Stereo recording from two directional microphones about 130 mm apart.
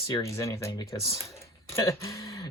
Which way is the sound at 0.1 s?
25° left (ahead or behind).